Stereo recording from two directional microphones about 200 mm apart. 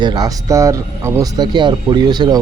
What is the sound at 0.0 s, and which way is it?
Speech, 20° right (ahead or behind).